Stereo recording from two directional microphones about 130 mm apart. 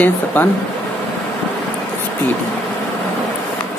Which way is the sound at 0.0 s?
15° left (ahead or behind).